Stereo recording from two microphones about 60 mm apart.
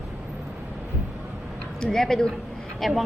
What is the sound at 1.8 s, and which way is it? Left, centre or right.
A woman's voice, centre.